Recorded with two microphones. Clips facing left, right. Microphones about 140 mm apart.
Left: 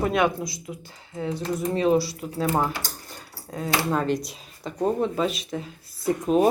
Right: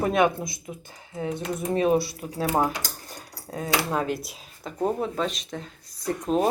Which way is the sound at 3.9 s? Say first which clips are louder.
Left 3 dB; 10° right (ahead or behind).